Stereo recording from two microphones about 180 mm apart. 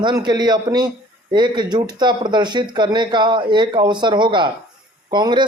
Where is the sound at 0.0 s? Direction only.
25° right (ahead or behind).